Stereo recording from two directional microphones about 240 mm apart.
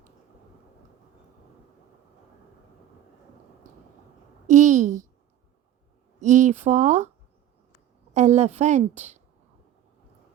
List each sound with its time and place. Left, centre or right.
3.6 s a sound: right
6.1 s a woman's voice: right
8.1 s a woman's voice: right